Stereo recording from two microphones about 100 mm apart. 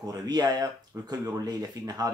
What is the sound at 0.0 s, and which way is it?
Speech, 40° right (ahead or behind).